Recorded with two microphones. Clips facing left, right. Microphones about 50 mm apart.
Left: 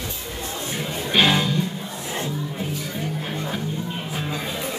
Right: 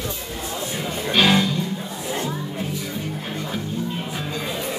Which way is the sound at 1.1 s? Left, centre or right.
Centre.